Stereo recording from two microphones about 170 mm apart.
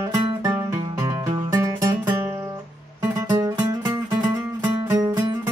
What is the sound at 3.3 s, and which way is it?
Music, 15° right (ahead or behind).